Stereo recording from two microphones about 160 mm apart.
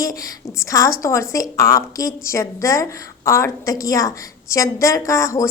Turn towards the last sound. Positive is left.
turn(degrees=20)  # may be behind; listen again after turning